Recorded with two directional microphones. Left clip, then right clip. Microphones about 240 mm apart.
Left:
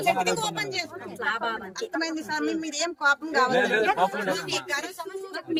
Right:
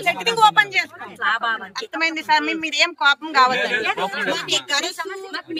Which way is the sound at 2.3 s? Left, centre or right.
Right.